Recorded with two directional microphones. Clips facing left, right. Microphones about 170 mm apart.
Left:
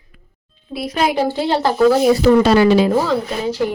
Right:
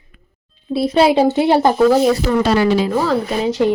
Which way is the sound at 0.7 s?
30° right (ahead or behind).